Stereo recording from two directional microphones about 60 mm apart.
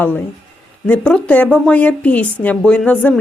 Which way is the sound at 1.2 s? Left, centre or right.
Left.